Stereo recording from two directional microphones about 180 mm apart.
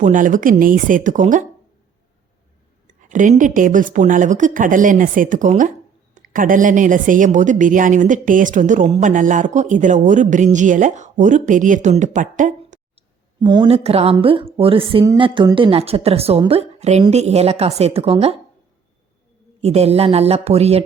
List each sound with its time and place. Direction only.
0.0 s a woman's voice: 45° right (ahead or behind)
2.8 s a woman's voice: 45° right (ahead or behind)
13.4 s a woman's voice: 25° right (ahead or behind)
19.6 s a woman's voice: 35° right (ahead or behind)